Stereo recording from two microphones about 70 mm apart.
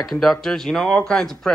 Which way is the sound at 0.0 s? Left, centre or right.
Centre.